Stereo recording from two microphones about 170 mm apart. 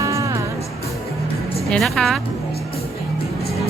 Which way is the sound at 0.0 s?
20° right (ahead or behind).